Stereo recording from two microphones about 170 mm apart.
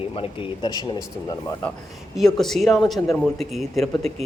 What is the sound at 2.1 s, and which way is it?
A man's voice, centre (ahead or behind).